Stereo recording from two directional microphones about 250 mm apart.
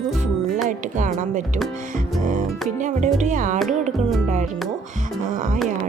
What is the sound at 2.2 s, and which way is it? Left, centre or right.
Music, right.